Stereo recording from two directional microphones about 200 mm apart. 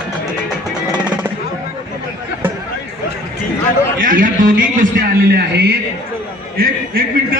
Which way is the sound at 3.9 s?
45° right (ahead or behind).